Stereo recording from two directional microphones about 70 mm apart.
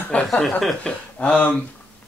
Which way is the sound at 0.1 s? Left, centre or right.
Centre.